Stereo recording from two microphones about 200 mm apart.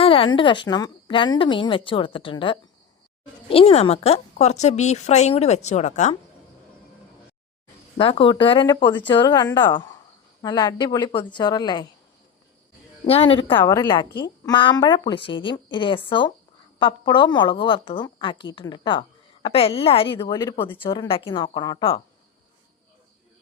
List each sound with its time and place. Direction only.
0.0 s a woman's voice: 25° left (ahead or behind)
7.9 s a woman's voice: 25° left (ahead or behind)
13.1 s a woman's voice: 30° left (ahead or behind)